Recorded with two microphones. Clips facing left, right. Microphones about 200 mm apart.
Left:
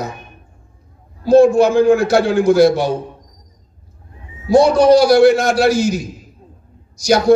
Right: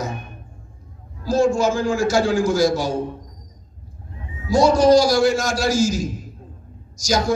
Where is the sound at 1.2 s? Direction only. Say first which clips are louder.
Left 8 dB; 60° left (ahead or behind).